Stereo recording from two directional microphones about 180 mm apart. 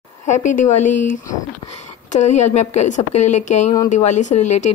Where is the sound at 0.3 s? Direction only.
45° left (ahead or behind).